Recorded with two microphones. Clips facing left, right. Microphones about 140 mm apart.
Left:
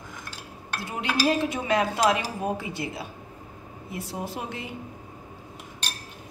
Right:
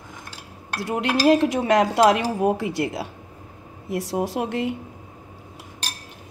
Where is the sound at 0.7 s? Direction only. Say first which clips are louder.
Right 5 dB; 75° right (ahead or behind).